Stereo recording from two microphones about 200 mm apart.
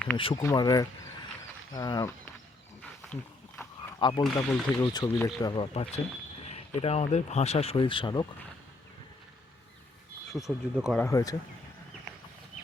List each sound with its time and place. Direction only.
0.2 s speech: 25° left (ahead or behind)
4.0 s speech: 20° left (ahead or behind)
10.3 s speech: centre (ahead or behind)
11.0 s speech: 15° left (ahead or behind)